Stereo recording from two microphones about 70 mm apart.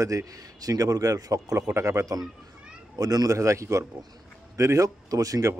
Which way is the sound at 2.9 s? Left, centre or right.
Right.